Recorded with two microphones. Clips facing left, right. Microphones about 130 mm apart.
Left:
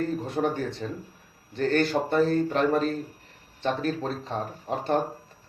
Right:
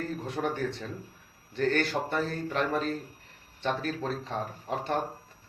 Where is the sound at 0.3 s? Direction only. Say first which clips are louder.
Left 3 dB; 35° left (ahead or behind).